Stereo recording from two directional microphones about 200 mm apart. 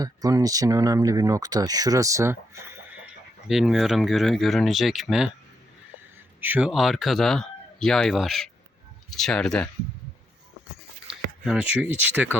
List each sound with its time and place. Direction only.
0.0 s speech: 20° right (ahead or behind)
3.5 s speech: centre (ahead or behind)
6.4 s speech: 5° right (ahead or behind)
11.4 s speech: 5° right (ahead or behind)